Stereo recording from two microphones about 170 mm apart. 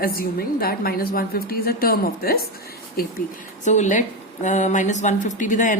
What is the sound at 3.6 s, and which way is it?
A woman's voice, 45° left (ahead or behind).